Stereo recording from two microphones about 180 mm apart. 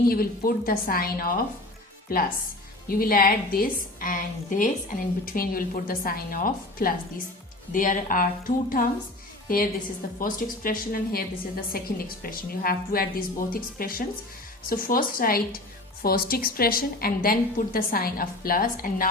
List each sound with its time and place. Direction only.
0.1 s a woman's voice: 55° left (ahead or behind)
10.2 s a woman's voice: 50° left (ahead or behind)